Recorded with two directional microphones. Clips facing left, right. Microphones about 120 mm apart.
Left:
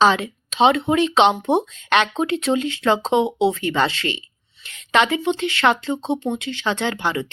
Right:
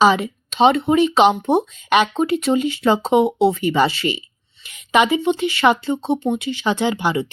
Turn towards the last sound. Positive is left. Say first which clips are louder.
# right 3 dB
turn(degrees=-10)  # may be behind; listen again after turning